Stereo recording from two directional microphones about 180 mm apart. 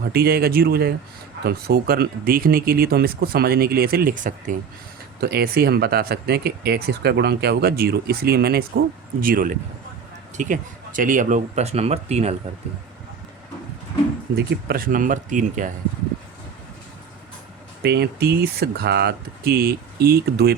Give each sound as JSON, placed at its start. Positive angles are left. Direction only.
{"t": 0.1, "sound": "speech", "side_deg": -55}
{"t": 5.2, "sound": "speech", "side_deg": -60}
{"t": 14.3, "sound": "speech", "side_deg": -55}
{"t": 17.8, "sound": "speech", "side_deg": -60}